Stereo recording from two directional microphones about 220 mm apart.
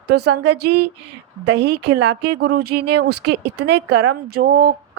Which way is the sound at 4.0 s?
90° right.